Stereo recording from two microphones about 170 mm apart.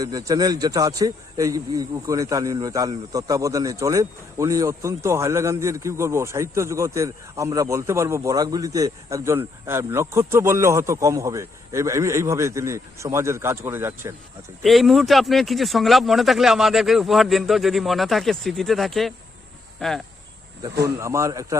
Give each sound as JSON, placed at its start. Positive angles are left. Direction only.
{"t": 0.0, "sound": "speech", "side_deg": -20}
{"t": 14.6, "sound": "speech", "side_deg": 0}
{"t": 20.8, "sound": "a man's voice", "side_deg": -15}